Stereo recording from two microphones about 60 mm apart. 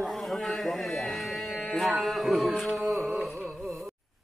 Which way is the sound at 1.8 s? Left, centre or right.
Centre.